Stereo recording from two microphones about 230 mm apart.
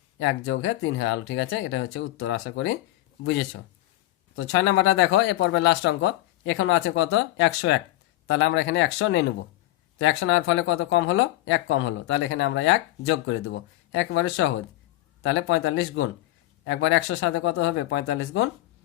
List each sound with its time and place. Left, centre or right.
0.2 s speech: left
4.4 s speech: left